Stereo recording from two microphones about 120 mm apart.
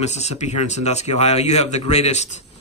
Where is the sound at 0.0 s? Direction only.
65° left (ahead or behind).